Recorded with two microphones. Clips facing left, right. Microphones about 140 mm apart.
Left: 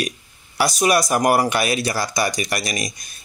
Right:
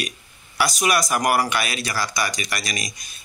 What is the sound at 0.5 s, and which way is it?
Speech, 30° left (ahead or behind).